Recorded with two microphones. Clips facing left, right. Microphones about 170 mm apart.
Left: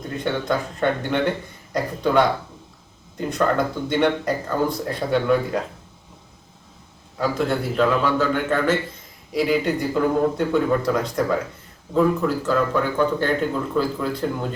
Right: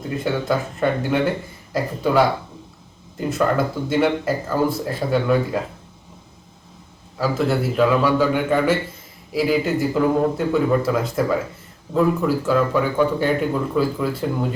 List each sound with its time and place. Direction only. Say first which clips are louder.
0.1 s speech: right 2 dB; 5° right (ahead or behind)
7.2 s speech: right 2 dB; 5° right (ahead or behind)